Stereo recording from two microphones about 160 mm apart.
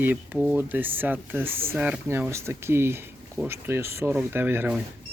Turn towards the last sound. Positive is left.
turn(degrees=-10)  # may be behind; listen again after turning